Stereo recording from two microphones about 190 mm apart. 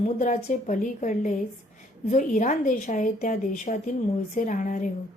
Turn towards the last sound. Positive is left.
turn(degrees=40)  # may be behind; listen again after turning